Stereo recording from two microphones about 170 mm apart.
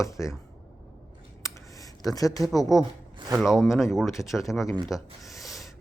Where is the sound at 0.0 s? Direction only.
15° left (ahead or behind).